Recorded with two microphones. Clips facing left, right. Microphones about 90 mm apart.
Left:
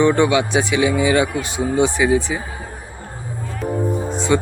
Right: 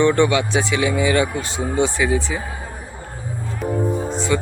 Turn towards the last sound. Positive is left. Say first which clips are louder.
# left 2 dB
turn(degrees=20)  # may be behind; listen again after turning